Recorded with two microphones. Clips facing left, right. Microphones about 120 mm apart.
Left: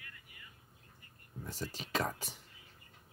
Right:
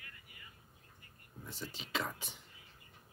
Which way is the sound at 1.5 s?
40° left (ahead or behind).